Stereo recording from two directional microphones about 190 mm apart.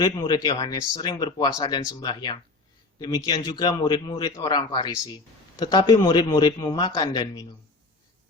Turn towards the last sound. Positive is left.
turn(degrees=20)  # may be behind; listen again after turning